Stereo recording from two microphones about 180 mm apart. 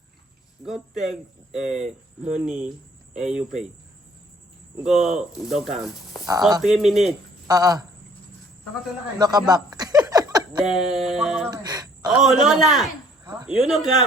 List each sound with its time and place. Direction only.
0.6 s speech: centre (ahead or behind)
4.8 s speech: centre (ahead or behind)
7.4 s speech: 20° right (ahead or behind)
9.1 s speech: 20° right (ahead or behind)
10.1 s a sound: 20° right (ahead or behind)
10.6 s speech: centre (ahead or behind)
11.5 s a sound: 20° right (ahead or behind)
12.1 s speech: centre (ahead or behind)